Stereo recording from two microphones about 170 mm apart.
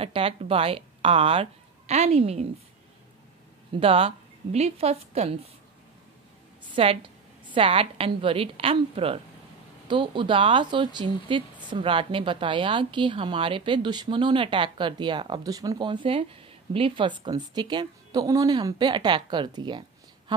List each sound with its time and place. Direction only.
0.0 s speech: 35° right (ahead or behind)
3.8 s a woman's voice: 35° right (ahead or behind)
6.7 s a woman's voice: 30° right (ahead or behind)